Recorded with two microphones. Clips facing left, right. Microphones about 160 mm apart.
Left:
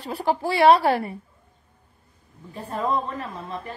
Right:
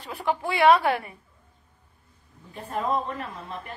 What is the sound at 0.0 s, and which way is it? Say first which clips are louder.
Speech: left 3 dB; 35° left (ahead or behind).